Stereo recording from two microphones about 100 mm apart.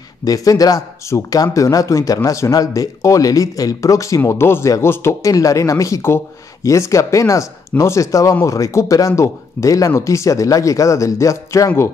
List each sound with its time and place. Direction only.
0.2 s speech: 35° left (ahead or behind)